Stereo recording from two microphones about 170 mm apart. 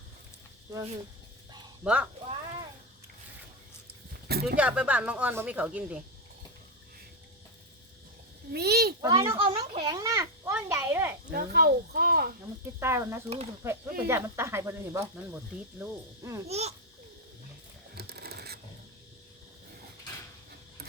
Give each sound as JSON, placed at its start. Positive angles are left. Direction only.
{"t": 1.8, "sound": "speech", "side_deg": -5}
{"t": 4.3, "sound": "speech", "side_deg": -65}
{"t": 4.5, "sound": "speech", "side_deg": -5}
{"t": 8.5, "sound": "a child's voice", "side_deg": -65}
{"t": 9.0, "sound": "a child's voice", "side_deg": -20}
{"t": 11.3, "sound": "speech", "side_deg": -65}
{"t": 12.8, "sound": "speech", "side_deg": -15}
{"t": 16.5, "sound": "speech", "side_deg": -40}
{"t": 17.9, "sound": "a sound", "side_deg": -70}